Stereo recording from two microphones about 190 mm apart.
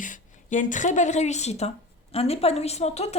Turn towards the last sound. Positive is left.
turn(degrees=35)  # may be behind; listen again after turning